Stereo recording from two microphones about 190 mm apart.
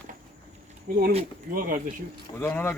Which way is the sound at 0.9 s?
50° right (ahead or behind).